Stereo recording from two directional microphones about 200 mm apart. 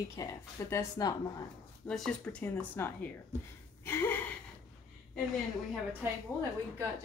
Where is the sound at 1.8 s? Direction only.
5° left (ahead or behind).